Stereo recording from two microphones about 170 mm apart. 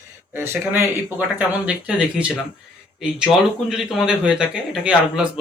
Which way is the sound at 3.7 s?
5° right (ahead or behind).